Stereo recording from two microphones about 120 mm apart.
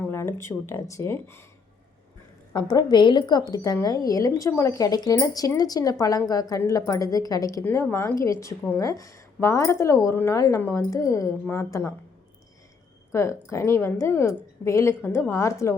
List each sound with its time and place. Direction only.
0.1 s speech: 20° left (ahead or behind)
2.5 s a woman's voice: 35° left (ahead or behind)
7.6 s a woman's voice: 20° left (ahead or behind)
13.1 s a woman's voice: 25° left (ahead or behind)